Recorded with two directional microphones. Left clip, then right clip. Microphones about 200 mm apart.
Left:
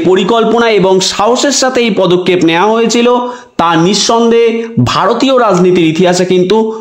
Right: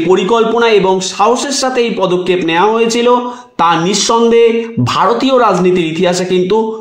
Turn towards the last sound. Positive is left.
turn(degrees=40)  # may be behind; listen again after turning